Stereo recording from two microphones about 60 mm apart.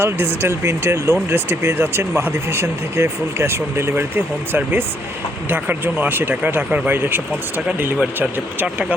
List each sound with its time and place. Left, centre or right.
0.0 s speech: right
6.9 s speech: right
8.2 s speech: centre